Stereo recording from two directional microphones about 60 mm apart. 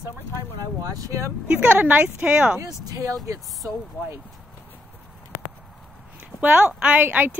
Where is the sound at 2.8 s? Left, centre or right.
Right.